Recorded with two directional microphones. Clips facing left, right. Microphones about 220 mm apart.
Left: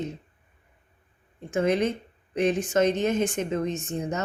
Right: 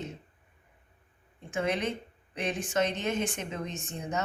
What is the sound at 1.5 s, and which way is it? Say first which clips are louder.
A woman's voice: left 7 dB; 45° left (ahead or behind).